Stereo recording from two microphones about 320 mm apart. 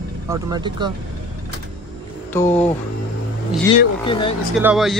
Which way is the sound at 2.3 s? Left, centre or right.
Centre.